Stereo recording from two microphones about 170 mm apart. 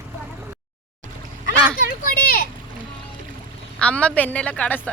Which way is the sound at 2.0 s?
60° left (ahead or behind).